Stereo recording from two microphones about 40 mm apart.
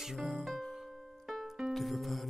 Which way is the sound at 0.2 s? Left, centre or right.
Centre.